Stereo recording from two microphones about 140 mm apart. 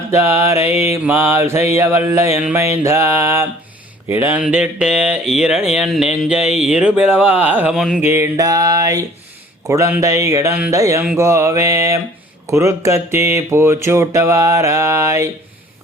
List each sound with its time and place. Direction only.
0.1 s mantra: 20° right (ahead or behind)
1.0 s speech: 20° right (ahead or behind)
4.4 s a sound: 5° right (ahead or behind)
8.0 s speech: 20° right (ahead or behind)